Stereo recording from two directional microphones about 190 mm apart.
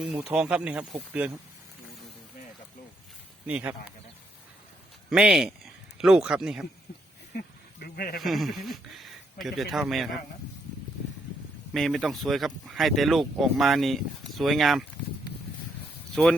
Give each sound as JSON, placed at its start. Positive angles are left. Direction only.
{"t": 0.0, "sound": "speech", "side_deg": -5}
{"t": 3.4, "sound": "speech", "side_deg": -10}
{"t": 5.0, "sound": "speech", "side_deg": -5}
{"t": 7.9, "sound": "speech", "side_deg": 55}
{"t": 8.2, "sound": "speech", "side_deg": 0}
{"t": 11.7, "sound": "speech", "side_deg": 0}